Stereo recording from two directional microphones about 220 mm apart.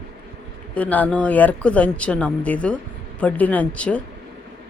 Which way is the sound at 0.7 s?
5° left (ahead or behind).